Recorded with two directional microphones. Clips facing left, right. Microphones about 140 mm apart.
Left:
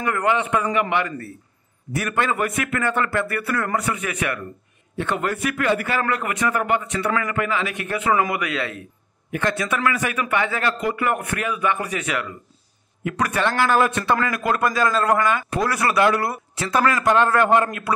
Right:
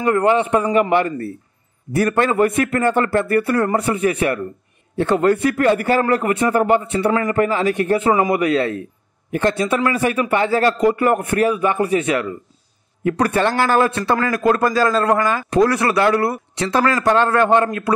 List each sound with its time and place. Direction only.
0.0 s a man's voice: 30° right (ahead or behind)